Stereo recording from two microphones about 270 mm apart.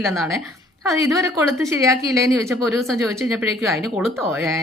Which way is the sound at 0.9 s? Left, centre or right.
Centre.